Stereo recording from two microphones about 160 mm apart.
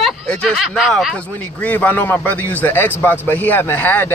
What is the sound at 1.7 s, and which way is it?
A man's voice, 10° left (ahead or behind).